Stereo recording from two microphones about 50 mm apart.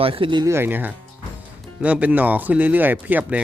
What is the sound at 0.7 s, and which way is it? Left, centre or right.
Speech, right.